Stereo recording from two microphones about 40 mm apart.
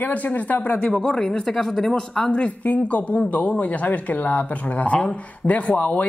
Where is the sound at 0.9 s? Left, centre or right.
Centre.